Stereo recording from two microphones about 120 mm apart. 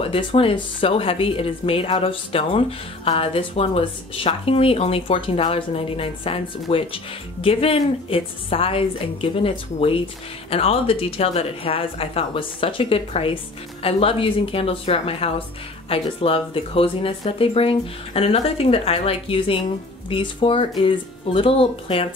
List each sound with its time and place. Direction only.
0.0 s speech: 50° left (ahead or behind)